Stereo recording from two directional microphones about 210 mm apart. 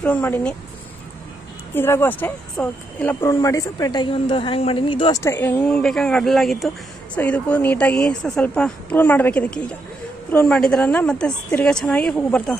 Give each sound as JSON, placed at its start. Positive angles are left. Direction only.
{"t": 0.0, "sound": "speech", "side_deg": 10}
{"t": 1.8, "sound": "speech", "side_deg": 10}
{"t": 5.2, "sound": "a woman's voice", "side_deg": 10}